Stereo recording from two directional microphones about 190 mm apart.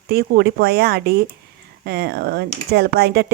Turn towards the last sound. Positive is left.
turn(degrees=-55)  # may be behind; listen again after turning